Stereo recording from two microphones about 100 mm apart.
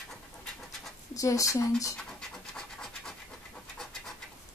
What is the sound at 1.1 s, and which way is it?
Speech, 35° left (ahead or behind).